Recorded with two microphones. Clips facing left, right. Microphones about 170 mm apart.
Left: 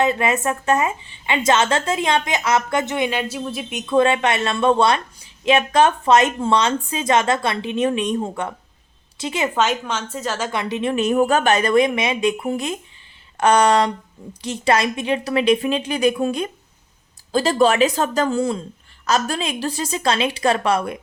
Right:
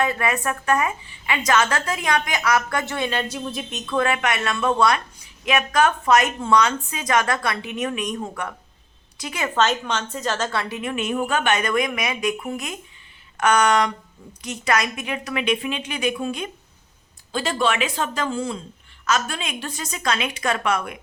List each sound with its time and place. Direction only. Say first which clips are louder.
0.0 s a woman's voice: left 4 dB; 20° left (ahead or behind); by 3.8 s 5° left (ahead or behind)
3.8 s a woman's voice: left 6 dB; 25° left (ahead or behind)
9.6 s a woman's voice: right 4 dB; 10° left (ahead or behind); by 21.0 s 35° left (ahead or behind)